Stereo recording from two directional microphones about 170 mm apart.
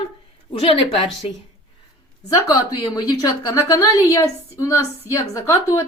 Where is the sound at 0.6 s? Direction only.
35° left (ahead or behind).